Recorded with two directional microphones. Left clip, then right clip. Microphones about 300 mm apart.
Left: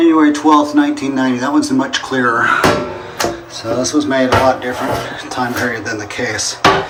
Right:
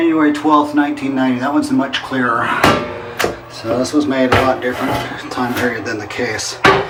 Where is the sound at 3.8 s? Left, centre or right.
Centre.